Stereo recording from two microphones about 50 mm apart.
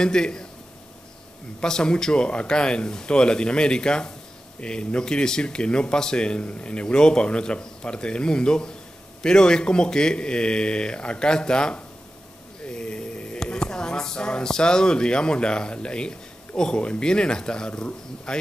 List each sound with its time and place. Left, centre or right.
0.0 s speech: centre
1.6 s speech: centre